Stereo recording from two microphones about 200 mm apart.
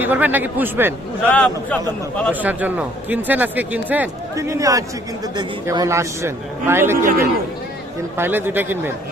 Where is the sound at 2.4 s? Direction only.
5° right (ahead or behind).